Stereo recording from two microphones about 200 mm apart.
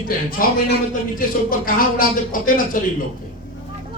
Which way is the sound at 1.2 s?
45° left (ahead or behind).